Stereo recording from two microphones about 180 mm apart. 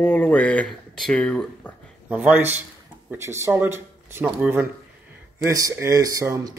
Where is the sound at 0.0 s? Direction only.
10° left (ahead or behind).